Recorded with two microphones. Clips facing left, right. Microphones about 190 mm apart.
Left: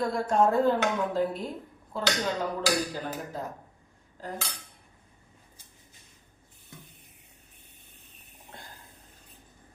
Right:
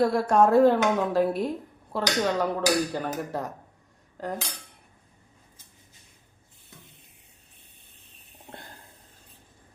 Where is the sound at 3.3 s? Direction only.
70° right (ahead or behind).